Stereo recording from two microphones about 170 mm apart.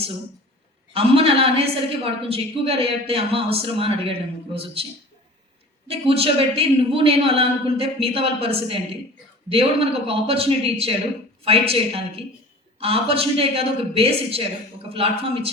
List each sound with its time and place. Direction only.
0.9 s a woman's voice: 35° right (ahead or behind)
5.9 s a woman's voice: 35° right (ahead or behind)